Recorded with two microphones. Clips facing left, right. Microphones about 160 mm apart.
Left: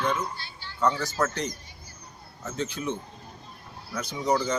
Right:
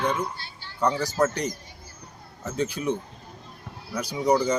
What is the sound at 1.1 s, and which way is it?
Speech, 30° right (ahead or behind).